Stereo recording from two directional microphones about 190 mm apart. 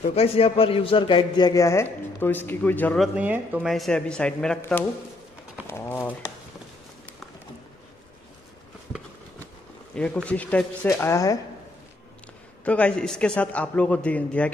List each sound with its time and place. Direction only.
0.0 s a man's voice: 30° left (ahead or behind); by 3.1 s 10° left (ahead or behind)
3.2 s speech: 10° right (ahead or behind)
5.7 s a man's voice: 15° left (ahead or behind)
9.9 s a man's voice: 5° left (ahead or behind)
12.6 s a man's voice: 5° left (ahead or behind)